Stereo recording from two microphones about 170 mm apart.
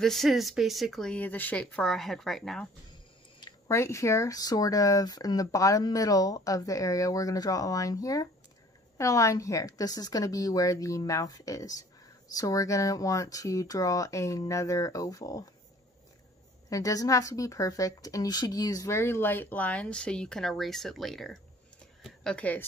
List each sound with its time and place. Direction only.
0.0 s speech: centre (ahead or behind)
3.3 s speech: 20° left (ahead or behind)
16.6 s a woman's voice: 20° left (ahead or behind)